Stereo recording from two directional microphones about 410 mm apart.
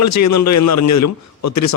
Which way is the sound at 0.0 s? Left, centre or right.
Left.